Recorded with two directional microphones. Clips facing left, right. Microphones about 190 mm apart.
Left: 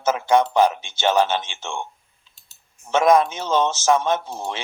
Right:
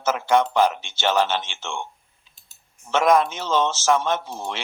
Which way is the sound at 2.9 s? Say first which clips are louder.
Left 2 dB; 15° left (ahead or behind).